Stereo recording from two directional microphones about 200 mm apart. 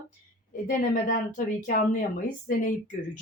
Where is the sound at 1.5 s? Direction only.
40° left (ahead or behind).